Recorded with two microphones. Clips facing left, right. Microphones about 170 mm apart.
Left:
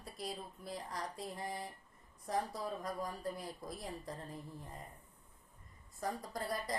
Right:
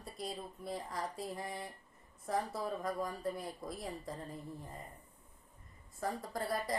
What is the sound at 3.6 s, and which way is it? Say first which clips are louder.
Speech: right 2 dB; centre (ahead or behind).